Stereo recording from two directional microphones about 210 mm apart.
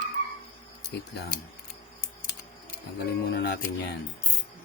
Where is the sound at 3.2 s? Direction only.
50° left (ahead or behind).